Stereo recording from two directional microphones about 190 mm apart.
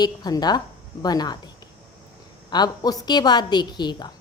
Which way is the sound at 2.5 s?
20° left (ahead or behind).